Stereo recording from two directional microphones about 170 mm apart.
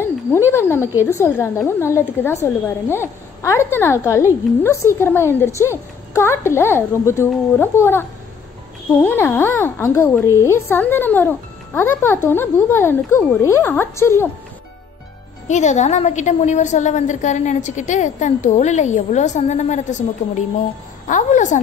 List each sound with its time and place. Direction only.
0.0 s a sound: 15° left (ahead or behind)
1.1 s a woman's voice: 15° left (ahead or behind)
15.4 s a woman's voice: 45° left (ahead or behind)